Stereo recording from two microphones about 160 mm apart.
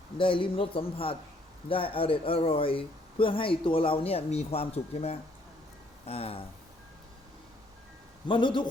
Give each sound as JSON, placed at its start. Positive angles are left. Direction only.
{"t": 0.2, "sound": "speech", "side_deg": 30}
{"t": 8.3, "sound": "speech", "side_deg": 30}